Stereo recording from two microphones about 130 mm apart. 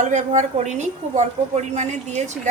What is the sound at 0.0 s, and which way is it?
Speech, 65° right (ahead or behind).